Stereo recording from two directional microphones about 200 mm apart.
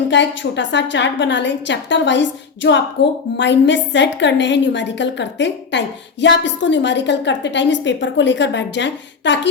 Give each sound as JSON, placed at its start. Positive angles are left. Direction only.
{"t": 0.1, "sound": "a woman's voice", "side_deg": 65}